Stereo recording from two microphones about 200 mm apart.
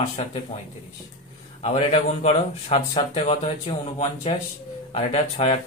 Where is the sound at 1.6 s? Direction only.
35° left (ahead or behind).